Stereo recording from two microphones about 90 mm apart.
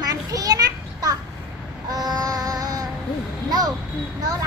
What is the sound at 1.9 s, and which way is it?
Child singing, 45° right (ahead or behind).